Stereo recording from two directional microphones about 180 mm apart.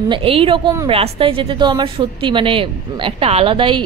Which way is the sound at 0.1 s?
30° right (ahead or behind).